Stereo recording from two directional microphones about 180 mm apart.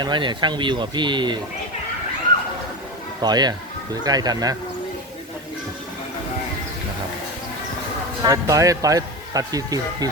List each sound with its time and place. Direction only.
0.0 s speech: 25° right (ahead or behind)
3.2 s speech: 25° right (ahead or behind)
8.2 s speech: 20° right (ahead or behind)